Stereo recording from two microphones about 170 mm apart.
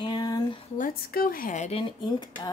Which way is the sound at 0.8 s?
60° left (ahead or behind).